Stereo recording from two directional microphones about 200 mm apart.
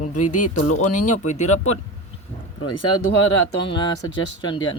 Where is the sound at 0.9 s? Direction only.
40° left (ahead or behind).